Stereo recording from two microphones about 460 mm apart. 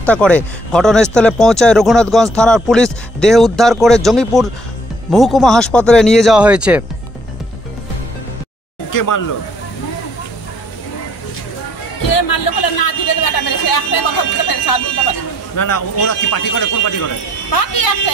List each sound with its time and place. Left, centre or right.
0.0 s speech: centre
8.9 s a sound: left
12.1 s speech: left